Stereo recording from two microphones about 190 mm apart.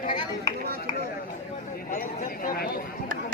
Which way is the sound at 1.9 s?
50° left (ahead or behind).